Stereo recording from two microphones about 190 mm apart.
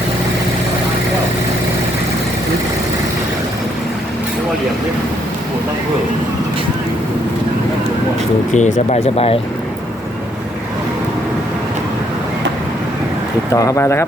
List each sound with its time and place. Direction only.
8.5 s speech: 40° left (ahead or behind)
13.5 s speech: 15° left (ahead or behind)